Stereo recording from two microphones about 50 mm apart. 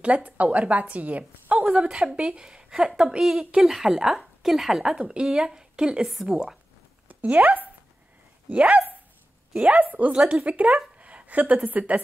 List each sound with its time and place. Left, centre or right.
0.0 s a woman's voice: right
1.7 s a woman's voice: centre
7.1 s speech: right
8.5 s a woman's voice: right